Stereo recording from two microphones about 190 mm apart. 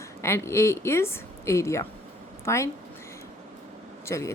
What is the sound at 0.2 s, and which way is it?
A woman's voice, 15° left (ahead or behind).